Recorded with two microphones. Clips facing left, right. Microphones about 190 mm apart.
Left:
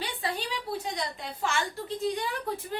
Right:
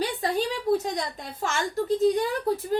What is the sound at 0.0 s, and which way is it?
A woman's voice, 40° right (ahead or behind).